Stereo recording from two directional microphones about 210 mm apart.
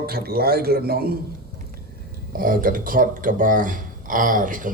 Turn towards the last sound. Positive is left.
turn(degrees=-40)  # may be behind; listen again after turning